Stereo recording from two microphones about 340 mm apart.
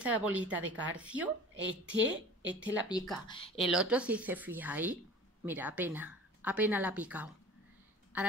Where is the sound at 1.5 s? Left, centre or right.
Right.